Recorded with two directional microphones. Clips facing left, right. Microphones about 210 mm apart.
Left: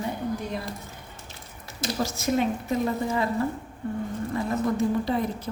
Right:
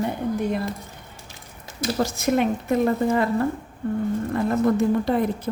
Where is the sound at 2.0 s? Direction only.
60° right (ahead or behind).